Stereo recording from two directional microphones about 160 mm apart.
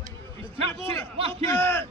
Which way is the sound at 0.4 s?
35° right (ahead or behind).